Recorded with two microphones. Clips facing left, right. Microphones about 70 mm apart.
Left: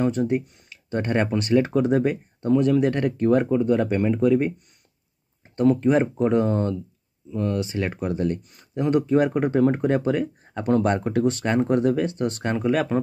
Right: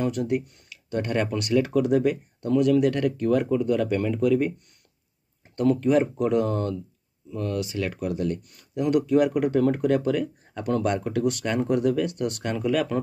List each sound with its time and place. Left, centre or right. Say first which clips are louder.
0.0 s speech: left 3 dB; left